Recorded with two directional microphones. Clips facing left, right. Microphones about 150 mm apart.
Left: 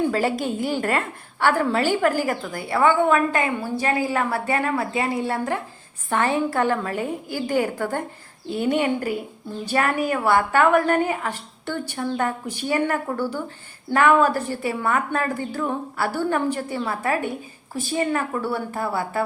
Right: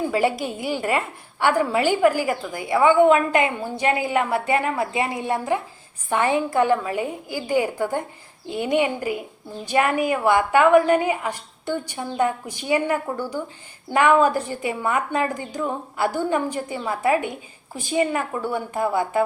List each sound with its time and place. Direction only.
0.1 s a woman's voice: 10° right (ahead or behind)